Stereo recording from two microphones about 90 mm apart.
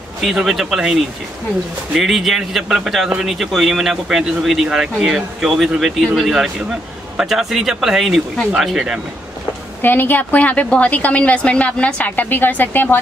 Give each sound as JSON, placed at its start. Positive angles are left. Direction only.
{"t": 0.2, "sound": "a man's voice", "side_deg": 0}
{"t": 2.0, "sound": "a man's voice", "side_deg": 0}
{"t": 9.8, "sound": "a woman's voice", "side_deg": 20}